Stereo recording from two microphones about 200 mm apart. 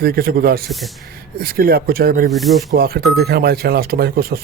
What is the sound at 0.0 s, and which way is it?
Speech, 50° right (ahead or behind).